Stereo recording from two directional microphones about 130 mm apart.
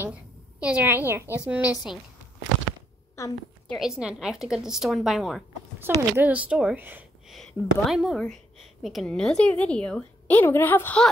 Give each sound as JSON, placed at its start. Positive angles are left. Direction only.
{"t": 0.0, "sound": "a woman's voice", "side_deg": -10}
{"t": 3.2, "sound": "a woman's voice", "side_deg": 20}
{"t": 3.6, "sound": "a woman's voice", "side_deg": 0}
{"t": 7.2, "sound": "a woman's voice", "side_deg": 0}